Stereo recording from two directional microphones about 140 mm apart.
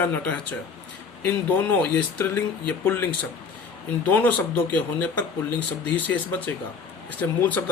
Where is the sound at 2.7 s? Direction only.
15° left (ahead or behind).